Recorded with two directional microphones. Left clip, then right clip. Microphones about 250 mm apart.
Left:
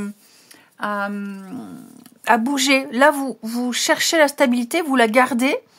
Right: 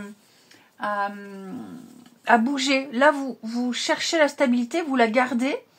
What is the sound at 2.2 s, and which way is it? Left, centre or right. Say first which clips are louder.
Speech: left 3 dB; left.